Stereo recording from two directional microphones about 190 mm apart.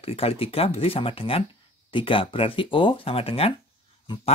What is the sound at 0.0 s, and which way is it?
Speech, 30° left (ahead or behind).